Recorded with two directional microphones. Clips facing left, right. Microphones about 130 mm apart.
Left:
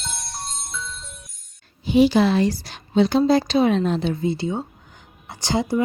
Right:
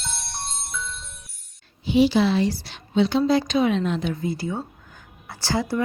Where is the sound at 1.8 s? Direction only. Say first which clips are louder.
Left 2 dB; 45° left (ahead or behind); by 5.8 s 20° left (ahead or behind).